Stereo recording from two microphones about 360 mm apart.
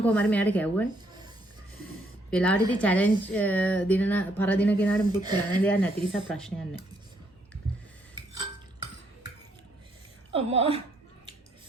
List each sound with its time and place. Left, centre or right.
0.0 s a woman's voice: centre
2.3 s a woman's voice: centre
5.2 s a woman's voice: centre
5.6 s a woman's voice: centre
10.3 s a woman's voice: centre